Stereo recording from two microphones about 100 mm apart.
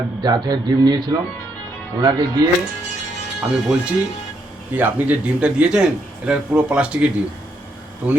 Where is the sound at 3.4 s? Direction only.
10° right (ahead or behind).